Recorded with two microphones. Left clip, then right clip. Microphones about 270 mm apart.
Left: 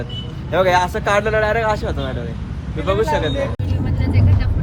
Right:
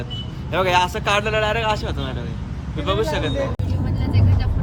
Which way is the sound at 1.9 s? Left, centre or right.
Centre.